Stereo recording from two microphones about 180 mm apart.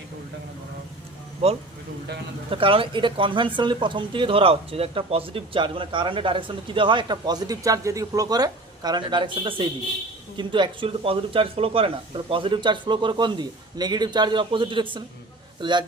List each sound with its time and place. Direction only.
1.4 s speech: 35° right (ahead or behind)